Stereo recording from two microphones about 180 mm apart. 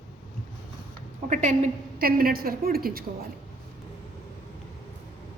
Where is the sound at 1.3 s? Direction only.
45° right (ahead or behind).